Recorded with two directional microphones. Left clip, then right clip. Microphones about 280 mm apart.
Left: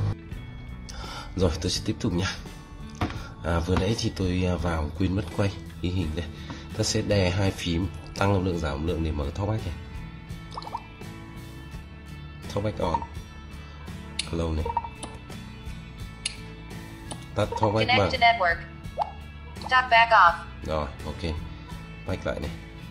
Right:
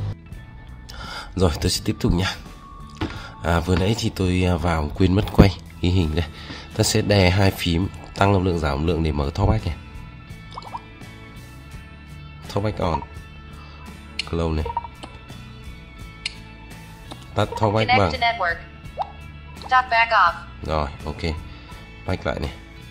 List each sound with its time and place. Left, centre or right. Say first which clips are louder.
0.9 s speech: right 5 dB; centre
3.2 s music: right 10 dB; centre
4.1 s speech: right 5 dB; centre
12.4 s speech: right 4 dB; right
14.8 s music: left 2 dB; centre
17.4 s speech: right 4 dB; centre
17.8 s speech: even; centre
20.6 s speech: right 6 dB; right